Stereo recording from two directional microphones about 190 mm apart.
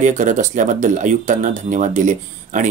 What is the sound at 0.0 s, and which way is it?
Speech, 40° right (ahead or behind).